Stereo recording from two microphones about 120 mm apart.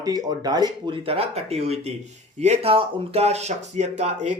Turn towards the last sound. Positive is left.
turn(degrees=-75)  # may be behind; listen again after turning